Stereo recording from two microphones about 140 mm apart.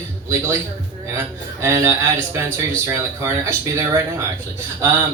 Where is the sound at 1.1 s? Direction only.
20° right (ahead or behind).